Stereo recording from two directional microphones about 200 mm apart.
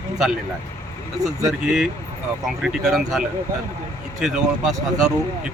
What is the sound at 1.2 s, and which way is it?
Speech, 15° right (ahead or behind).